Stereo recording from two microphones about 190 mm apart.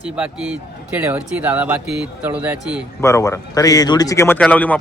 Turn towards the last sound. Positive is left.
turn(degrees=10)  # may be behind; listen again after turning